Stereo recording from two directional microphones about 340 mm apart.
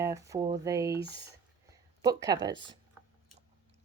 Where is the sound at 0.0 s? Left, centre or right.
Centre.